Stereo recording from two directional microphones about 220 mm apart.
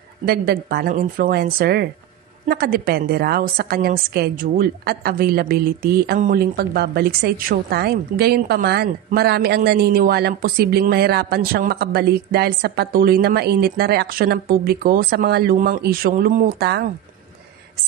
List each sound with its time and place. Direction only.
0.2 s a woman's voice: 45° right (ahead or behind)